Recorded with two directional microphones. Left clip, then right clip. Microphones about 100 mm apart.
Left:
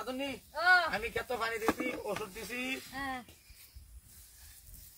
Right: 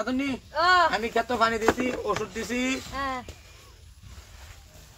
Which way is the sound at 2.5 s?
30° right (ahead or behind).